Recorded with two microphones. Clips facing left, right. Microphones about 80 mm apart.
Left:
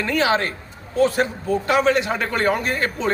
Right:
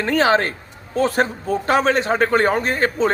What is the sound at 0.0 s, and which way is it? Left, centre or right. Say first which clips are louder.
A man's voice: right 3 dB; right.